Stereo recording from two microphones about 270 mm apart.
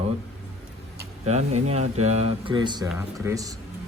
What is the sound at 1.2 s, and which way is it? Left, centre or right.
Speech, right.